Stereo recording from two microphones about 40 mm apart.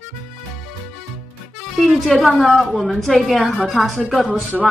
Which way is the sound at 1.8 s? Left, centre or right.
Centre.